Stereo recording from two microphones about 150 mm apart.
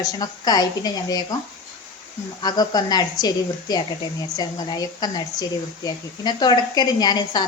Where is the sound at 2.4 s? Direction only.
25° left (ahead or behind).